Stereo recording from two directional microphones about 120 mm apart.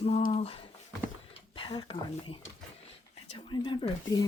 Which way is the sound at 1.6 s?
40° left (ahead or behind).